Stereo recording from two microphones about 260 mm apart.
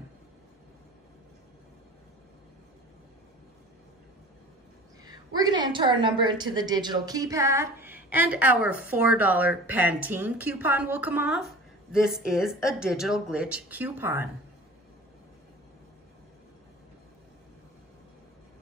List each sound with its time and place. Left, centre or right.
5.0 s a woman's voice: centre